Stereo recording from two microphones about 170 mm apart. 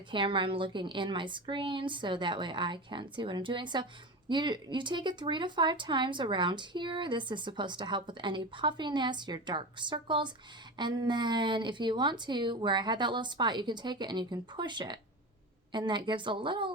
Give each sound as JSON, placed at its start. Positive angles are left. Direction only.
{"t": 0.1, "sound": "speech", "side_deg": -30}